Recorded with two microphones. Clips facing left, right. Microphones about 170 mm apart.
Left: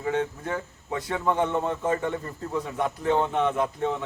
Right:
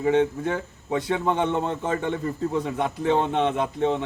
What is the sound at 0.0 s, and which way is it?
A man's voice, 20° right (ahead or behind).